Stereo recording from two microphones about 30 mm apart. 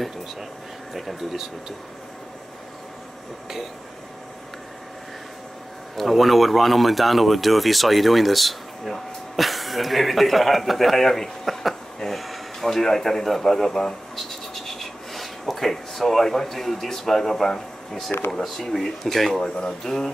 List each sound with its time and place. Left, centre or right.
5.9 s a man's voice: centre
12.1 s a sound: centre
12.7 s speech: centre
19.4 s speech: left